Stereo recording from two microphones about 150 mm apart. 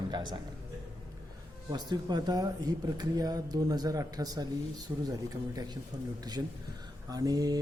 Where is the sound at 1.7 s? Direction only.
30° right (ahead or behind).